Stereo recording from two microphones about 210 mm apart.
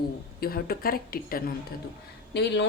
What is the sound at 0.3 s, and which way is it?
A woman's voice, 45° left (ahead or behind).